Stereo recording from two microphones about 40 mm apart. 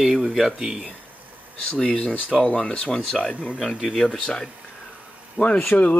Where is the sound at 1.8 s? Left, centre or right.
Left.